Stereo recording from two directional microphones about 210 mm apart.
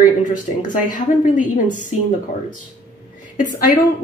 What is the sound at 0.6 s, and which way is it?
Speech, 35° left (ahead or behind).